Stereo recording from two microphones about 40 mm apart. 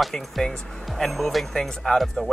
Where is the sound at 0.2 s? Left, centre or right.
Centre.